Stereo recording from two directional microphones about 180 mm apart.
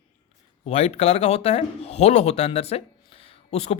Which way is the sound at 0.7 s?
35° left (ahead or behind).